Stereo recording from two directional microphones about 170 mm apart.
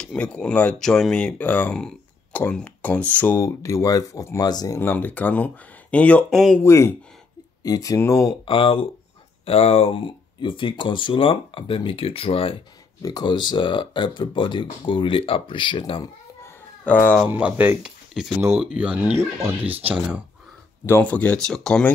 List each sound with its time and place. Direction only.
0.0 s speech: 5° left (ahead or behind)
6.6 s speech: 15° left (ahead or behind)
8.5 s speech: 30° left (ahead or behind)
16.8 s speech: 10° left (ahead or behind)
17.2 s speech: 5° right (ahead or behind)
20.8 s speech: 10° left (ahead or behind)